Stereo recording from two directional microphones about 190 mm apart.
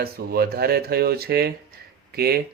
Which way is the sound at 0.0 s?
55° right (ahead or behind).